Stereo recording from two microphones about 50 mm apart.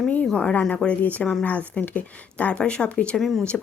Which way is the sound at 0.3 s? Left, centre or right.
Left.